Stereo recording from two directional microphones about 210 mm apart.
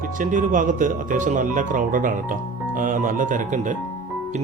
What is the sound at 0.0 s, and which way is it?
Speech, 40° right (ahead or behind).